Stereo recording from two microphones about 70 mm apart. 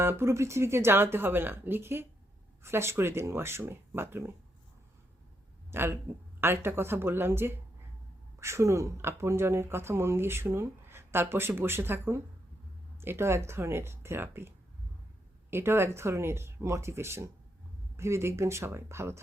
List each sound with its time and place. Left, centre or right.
0.0 s speech: right
5.7 s speech: right